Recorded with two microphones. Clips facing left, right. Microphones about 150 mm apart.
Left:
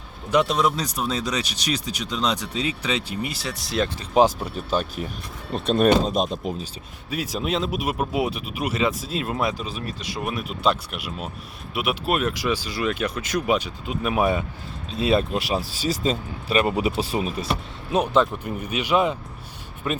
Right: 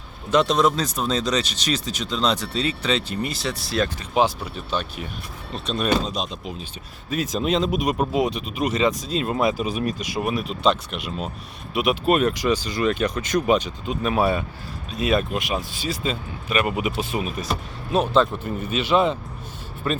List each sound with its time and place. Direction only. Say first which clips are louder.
0.3 s speech: right 2 dB; 10° left (ahead or behind)
4.1 s speech: left 5 dB; 40° left (ahead or behind)
7.1 s speech: right 3 dB; 10° left (ahead or behind)
9.6 s speech: right 7 dB; 15° right (ahead or behind)
10.2 s speech: right 2 dB; centre (ahead or behind)
14.8 s speech: left 1 dB; 25° left (ahead or behind)
17.9 s speech: right 1 dB; 15° left (ahead or behind)